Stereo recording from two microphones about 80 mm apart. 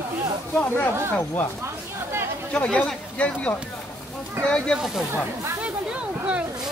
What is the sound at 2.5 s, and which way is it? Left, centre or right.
Speech, centre.